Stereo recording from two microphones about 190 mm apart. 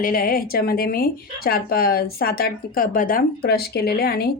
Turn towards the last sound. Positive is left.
turn(degrees=55)  # may be behind; listen again after turning